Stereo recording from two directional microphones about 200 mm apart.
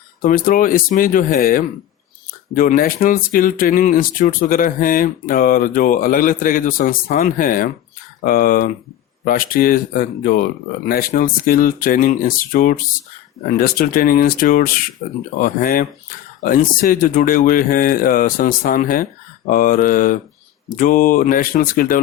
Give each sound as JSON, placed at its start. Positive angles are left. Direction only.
{"t": 0.2, "sound": "speech", "side_deg": 45}